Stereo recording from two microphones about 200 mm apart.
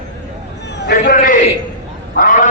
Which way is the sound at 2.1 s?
45° left (ahead or behind).